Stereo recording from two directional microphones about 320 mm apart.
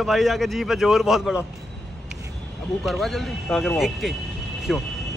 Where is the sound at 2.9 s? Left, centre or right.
Centre.